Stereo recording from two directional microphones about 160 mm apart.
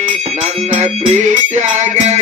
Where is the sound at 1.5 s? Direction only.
45° right (ahead or behind).